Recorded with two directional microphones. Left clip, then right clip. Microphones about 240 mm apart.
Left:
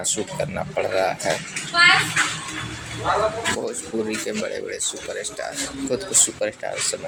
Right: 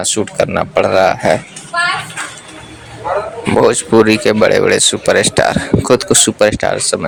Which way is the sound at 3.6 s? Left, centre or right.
Right.